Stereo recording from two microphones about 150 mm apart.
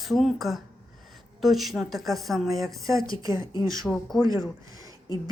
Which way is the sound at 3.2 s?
25° right (ahead or behind).